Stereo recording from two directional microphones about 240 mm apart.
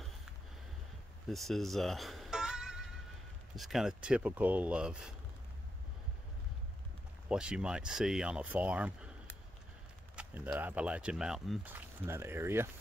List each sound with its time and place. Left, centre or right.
1.3 s music: centre
3.5 s speech: centre
7.2 s speech: centre
10.1 s speech: centre